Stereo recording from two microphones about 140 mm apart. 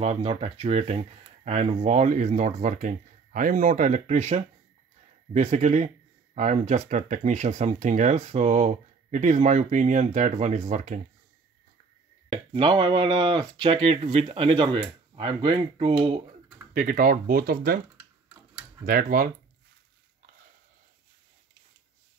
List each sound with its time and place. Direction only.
0.0 s speech: 50° right (ahead or behind)
12.3 s speech: 40° right (ahead or behind)
16.7 s speech: 75° right (ahead or behind)
18.9 s speech: 90° right